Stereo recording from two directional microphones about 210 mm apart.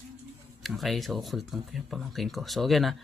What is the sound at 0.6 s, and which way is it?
Speech, centre (ahead or behind).